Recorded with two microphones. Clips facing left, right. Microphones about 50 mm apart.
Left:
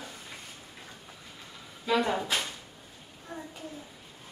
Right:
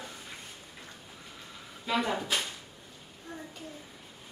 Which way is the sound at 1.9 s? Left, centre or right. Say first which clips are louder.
Left 3 dB; centre.